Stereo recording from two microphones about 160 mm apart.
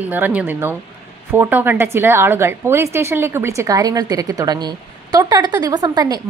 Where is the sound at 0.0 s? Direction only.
10° right (ahead or behind).